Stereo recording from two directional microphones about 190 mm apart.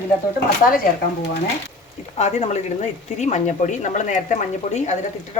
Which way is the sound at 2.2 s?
35° left (ahead or behind).